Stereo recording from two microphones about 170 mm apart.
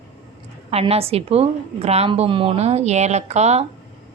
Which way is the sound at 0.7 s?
35° right (ahead or behind).